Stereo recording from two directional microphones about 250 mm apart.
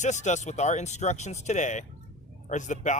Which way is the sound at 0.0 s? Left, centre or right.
Left.